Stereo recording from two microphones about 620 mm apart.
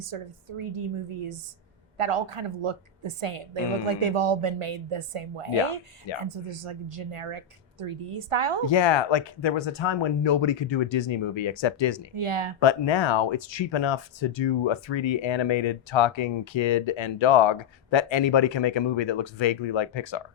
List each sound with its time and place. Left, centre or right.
0.0 s a woman's voice: right
8.6 s speech: left
12.1 s speech: right
12.5 s speech: left